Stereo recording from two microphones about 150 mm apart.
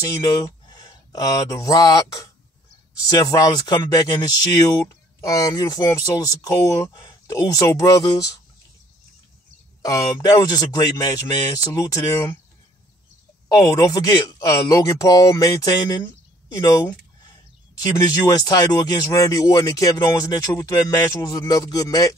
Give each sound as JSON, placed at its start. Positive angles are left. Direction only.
{"t": 0.0, "sound": "speech", "side_deg": 20}
{"t": 9.8, "sound": "speech", "side_deg": 25}
{"t": 13.5, "sound": "speech", "side_deg": 25}
{"t": 17.9, "sound": "speech", "side_deg": 25}